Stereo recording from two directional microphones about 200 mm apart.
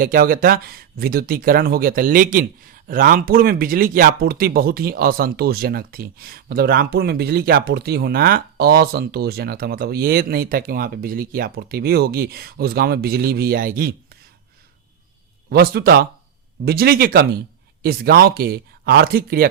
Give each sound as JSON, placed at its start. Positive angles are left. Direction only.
{"t": 0.0, "sound": "speech", "side_deg": -45}
{"t": 15.4, "sound": "speech", "side_deg": -50}